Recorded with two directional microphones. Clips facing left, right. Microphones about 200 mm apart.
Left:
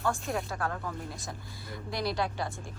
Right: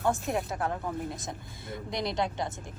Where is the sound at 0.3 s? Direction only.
20° right (ahead or behind).